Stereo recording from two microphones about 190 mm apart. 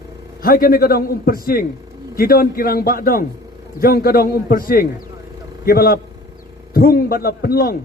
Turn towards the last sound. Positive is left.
turn(degrees=50)  # may be behind; listen again after turning